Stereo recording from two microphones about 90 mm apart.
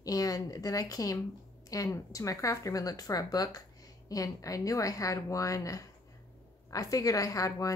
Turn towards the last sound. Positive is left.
turn(degrees=40)  # may be behind; listen again after turning